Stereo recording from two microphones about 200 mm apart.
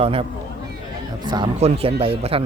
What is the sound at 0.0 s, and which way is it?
Speech, 30° right (ahead or behind).